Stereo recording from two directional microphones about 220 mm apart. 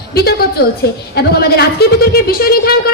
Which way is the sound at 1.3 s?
45° left (ahead or behind).